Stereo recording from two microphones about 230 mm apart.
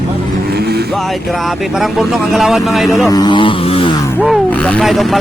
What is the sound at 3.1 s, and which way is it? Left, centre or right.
Vehicle, centre.